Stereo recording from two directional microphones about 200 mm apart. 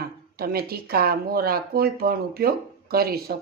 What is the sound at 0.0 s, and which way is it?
Speech, 50° right (ahead or behind).